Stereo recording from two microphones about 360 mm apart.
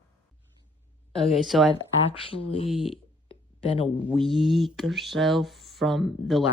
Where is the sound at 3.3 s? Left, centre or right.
Centre.